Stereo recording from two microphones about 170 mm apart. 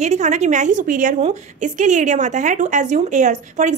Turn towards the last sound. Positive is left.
turn(degrees=-45)  # may be behind; listen again after turning